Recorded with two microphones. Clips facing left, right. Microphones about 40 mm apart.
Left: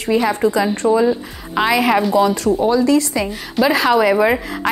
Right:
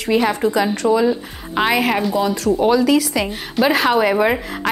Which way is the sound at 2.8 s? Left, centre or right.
Right.